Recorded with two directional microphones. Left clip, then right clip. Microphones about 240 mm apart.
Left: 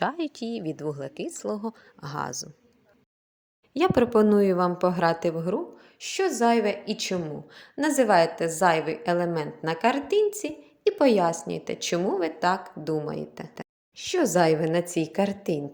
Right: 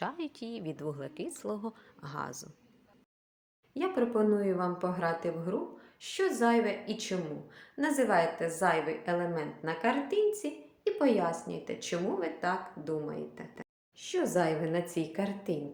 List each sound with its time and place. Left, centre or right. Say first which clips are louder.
0.0 s a woman's voice: left 9 dB; left
3.8 s a woman's voice: left 9 dB; left